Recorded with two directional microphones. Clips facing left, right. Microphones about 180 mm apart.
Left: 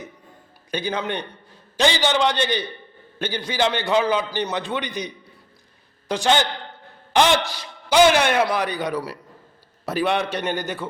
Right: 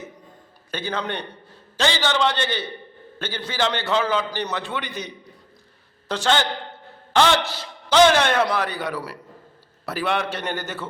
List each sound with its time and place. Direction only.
0.7 s a man's voice: 15° left (ahead or behind)